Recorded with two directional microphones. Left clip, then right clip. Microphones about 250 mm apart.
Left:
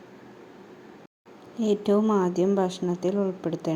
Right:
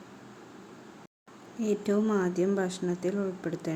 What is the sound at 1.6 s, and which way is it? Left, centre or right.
A woman's voice, centre.